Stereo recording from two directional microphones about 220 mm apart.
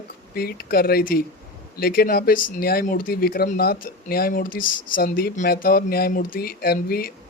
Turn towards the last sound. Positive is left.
turn(degrees=45)  # may be behind; listen again after turning